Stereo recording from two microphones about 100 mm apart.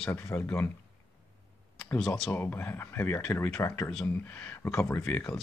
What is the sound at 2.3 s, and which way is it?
Speech, 20° left (ahead or behind).